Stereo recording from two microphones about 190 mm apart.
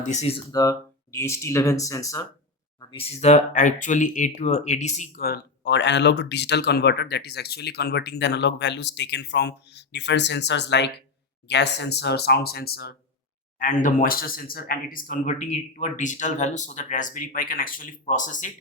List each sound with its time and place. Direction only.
0.0 s speech: 35° left (ahead or behind)
0.5 s speech: 15° left (ahead or behind)
2.9 s speech: 35° left (ahead or behind)